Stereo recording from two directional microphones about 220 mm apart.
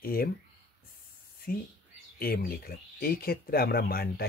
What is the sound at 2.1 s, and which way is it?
Speech, 45° left (ahead or behind).